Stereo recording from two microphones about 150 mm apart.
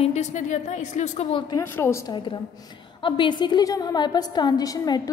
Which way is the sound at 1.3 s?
25° left (ahead or behind).